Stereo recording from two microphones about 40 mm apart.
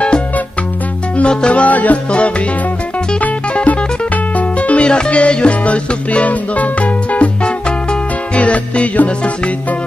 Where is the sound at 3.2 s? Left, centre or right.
Left.